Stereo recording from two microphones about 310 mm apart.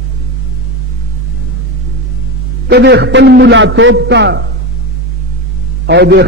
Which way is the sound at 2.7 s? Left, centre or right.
Right.